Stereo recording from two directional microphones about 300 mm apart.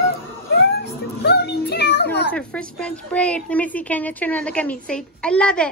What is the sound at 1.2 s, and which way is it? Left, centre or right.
Music, left.